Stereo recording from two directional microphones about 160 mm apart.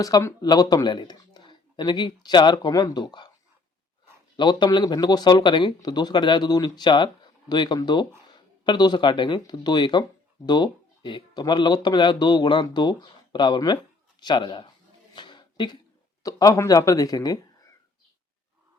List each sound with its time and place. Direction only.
0.0 s speech: 20° left (ahead or behind)
4.4 s speech: 30° left (ahead or behind)
15.1 s a sound: 30° left (ahead or behind)
16.2 s speech: 25° left (ahead or behind)